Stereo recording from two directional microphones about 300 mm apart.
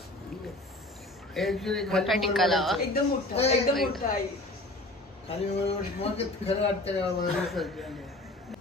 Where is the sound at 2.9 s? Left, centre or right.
Left.